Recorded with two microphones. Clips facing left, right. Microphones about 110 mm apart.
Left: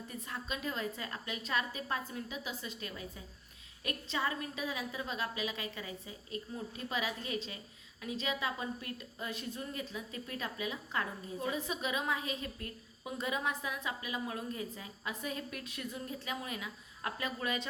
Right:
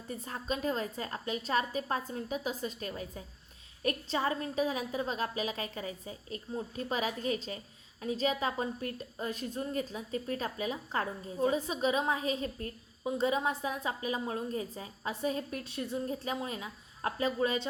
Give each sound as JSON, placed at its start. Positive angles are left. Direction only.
{"t": 0.1, "sound": "a woman's voice", "side_deg": -35}